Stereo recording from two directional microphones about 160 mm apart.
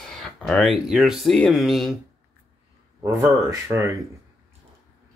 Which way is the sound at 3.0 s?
20° right (ahead or behind).